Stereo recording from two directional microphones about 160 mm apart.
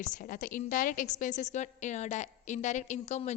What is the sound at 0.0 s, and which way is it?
A woman's voice, 55° left (ahead or behind).